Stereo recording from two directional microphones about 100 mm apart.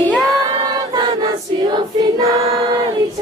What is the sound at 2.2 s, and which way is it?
Choir, 35° right (ahead or behind).